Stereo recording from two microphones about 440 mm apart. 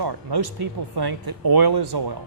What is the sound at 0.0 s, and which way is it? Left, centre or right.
Speech, right.